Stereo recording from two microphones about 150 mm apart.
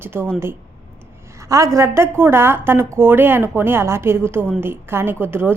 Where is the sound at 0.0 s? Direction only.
15° right (ahead or behind).